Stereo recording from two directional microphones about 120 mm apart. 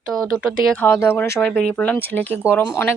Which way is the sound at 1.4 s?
10° left (ahead or behind).